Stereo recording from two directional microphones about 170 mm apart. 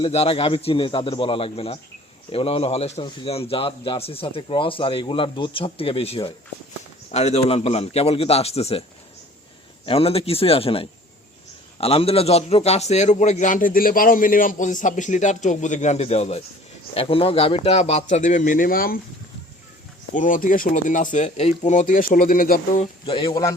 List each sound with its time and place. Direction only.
0.0 s speech: 35° left (ahead or behind)
9.8 s a man's voice: 35° left (ahead or behind); by 18.9 s 60° left (ahead or behind)
20.1 s a man's voice: 50° left (ahead or behind)
22.8 s speech: 30° left (ahead or behind)